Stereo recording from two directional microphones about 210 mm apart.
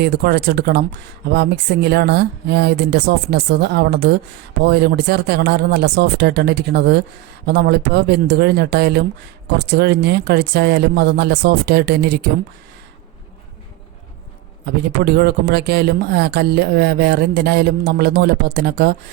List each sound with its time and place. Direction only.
0.0 s speech: 50° right (ahead or behind)
14.8 s speech: 50° right (ahead or behind)